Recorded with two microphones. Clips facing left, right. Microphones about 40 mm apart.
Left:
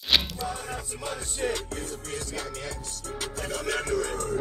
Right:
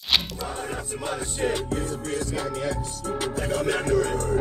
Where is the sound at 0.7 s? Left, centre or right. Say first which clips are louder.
Right 4 dB; centre.